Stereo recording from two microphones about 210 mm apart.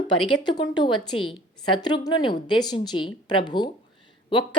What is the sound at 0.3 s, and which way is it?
Speech, 20° left (ahead or behind).